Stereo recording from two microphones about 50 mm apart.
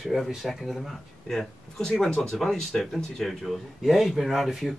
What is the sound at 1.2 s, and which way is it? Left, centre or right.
Speech, centre.